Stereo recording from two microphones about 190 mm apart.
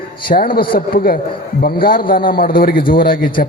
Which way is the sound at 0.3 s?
50° left (ahead or behind).